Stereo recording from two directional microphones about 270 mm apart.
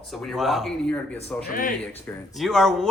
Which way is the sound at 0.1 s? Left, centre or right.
Centre.